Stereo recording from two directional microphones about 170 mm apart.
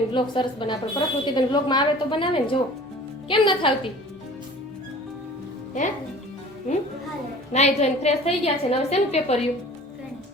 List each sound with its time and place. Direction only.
0.1 s a woman's voice: 30° left (ahead or behind)
7.5 s a woman's voice: 40° left (ahead or behind)